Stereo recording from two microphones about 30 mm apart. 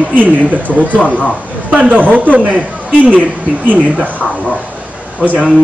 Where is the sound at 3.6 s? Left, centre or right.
Right.